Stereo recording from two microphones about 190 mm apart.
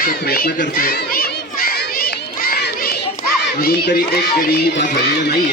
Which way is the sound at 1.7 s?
50° left (ahead or behind).